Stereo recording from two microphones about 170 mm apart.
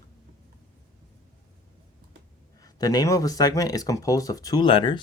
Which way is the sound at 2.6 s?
20° left (ahead or behind).